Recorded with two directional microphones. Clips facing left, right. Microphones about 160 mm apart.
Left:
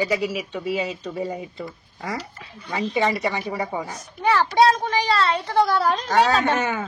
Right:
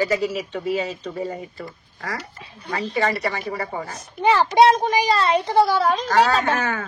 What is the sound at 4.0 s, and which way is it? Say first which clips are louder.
A child's voice: right 3 dB; 25° right (ahead or behind).